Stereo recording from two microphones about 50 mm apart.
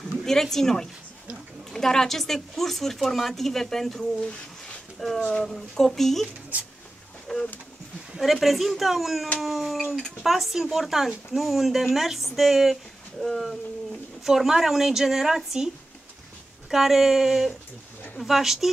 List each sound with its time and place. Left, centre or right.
0.2 s speech: centre
4.0 s speech: left
5.0 s speech: centre
7.3 s pigeon: centre
8.2 s a woman's voice: centre
16.7 s speech: centre